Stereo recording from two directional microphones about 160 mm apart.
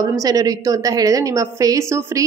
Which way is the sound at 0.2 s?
20° right (ahead or behind).